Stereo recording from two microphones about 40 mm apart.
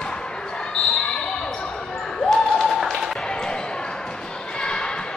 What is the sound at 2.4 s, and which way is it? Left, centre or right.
Applause, centre.